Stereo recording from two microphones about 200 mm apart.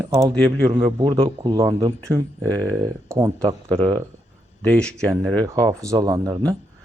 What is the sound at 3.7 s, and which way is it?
Speech, 25° right (ahead or behind).